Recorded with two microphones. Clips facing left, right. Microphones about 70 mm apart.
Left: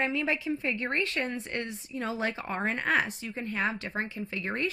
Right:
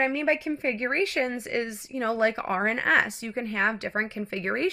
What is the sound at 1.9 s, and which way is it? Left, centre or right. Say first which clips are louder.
Speech: right 5 dB; right.